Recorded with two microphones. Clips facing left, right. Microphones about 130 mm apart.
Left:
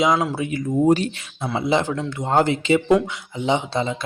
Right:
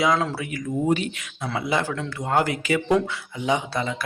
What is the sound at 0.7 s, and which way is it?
Speech, 40° left (ahead or behind).